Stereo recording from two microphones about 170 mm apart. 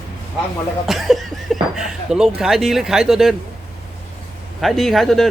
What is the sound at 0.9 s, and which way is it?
Speech, centre (ahead or behind).